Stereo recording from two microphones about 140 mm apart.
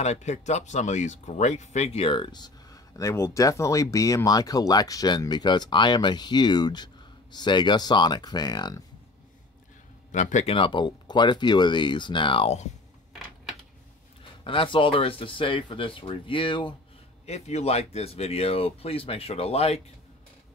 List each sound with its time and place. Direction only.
0.0 s speech: 55° left (ahead or behind); by 8.8 s 30° left (ahead or behind)
10.1 s speech: 60° left (ahead or behind); by 12.5 s 40° left (ahead or behind)
14.2 s speech: 40° left (ahead or behind)
17.3 s speech: 50° left (ahead or behind)